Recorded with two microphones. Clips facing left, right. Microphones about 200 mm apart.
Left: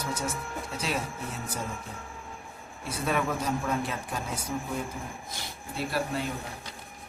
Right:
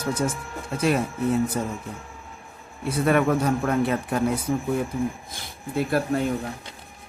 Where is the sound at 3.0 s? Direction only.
60° right (ahead or behind).